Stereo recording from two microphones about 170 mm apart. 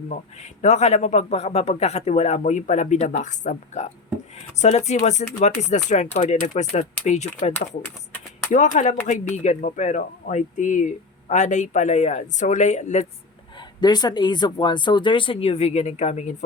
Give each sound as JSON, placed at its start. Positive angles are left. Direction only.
{"t": 0.6, "sound": "speech", "side_deg": 40}
{"t": 13.8, "sound": "speech", "side_deg": 25}